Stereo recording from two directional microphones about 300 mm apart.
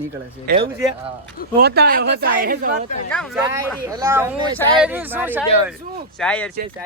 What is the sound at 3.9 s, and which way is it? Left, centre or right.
Speech, centre.